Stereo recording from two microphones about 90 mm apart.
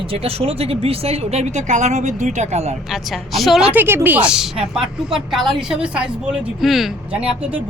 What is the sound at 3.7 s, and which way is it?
Speech, 25° right (ahead or behind).